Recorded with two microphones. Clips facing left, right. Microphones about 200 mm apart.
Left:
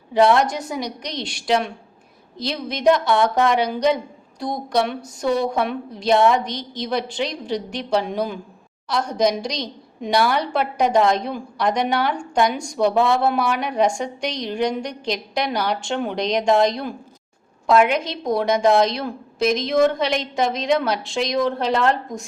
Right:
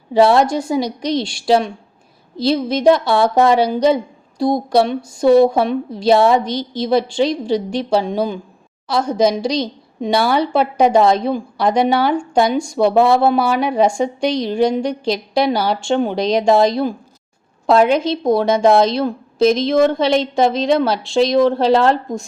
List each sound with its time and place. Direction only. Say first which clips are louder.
0.1 s a woman's voice: right 4 dB; 30° right (ahead or behind)
9.0 s a woman's voice: right 5 dB; 5° right (ahead or behind)
10.1 s speech: right 4 dB; 30° right (ahead or behind)
17.7 s a woman's voice: right 4 dB; 30° right (ahead or behind)